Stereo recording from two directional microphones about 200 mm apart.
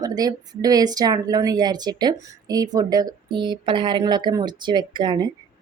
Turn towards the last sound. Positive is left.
turn(degrees=-20)  # may be behind; listen again after turning